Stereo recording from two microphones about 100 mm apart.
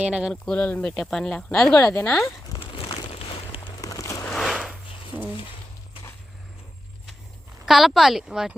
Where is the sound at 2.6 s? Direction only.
65° left (ahead or behind).